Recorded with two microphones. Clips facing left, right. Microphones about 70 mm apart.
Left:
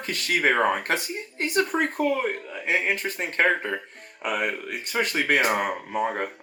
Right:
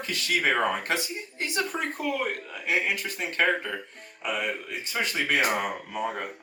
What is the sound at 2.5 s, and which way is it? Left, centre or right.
Speech, left.